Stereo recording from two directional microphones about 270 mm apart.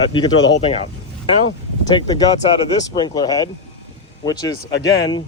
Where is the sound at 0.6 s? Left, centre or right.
Left.